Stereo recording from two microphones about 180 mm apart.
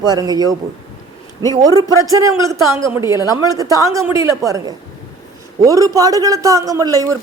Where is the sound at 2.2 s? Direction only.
15° right (ahead or behind).